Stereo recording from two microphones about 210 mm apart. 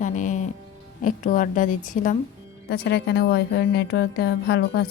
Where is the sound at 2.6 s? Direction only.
50° left (ahead or behind).